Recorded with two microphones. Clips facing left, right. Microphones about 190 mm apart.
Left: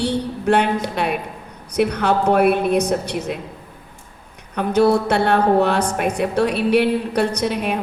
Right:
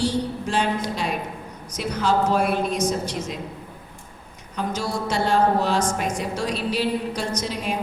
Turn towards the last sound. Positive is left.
turn(degrees=60)  # may be behind; listen again after turning